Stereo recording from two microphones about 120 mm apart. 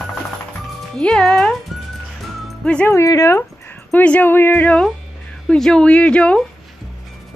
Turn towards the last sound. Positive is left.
turn(degrees=10)  # may be behind; listen again after turning